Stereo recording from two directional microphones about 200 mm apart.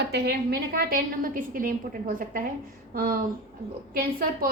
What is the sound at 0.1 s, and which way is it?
A woman's voice, 50° right (ahead or behind).